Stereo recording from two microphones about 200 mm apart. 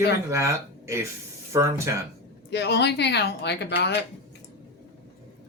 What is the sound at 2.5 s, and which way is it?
Speech, 60° left (ahead or behind).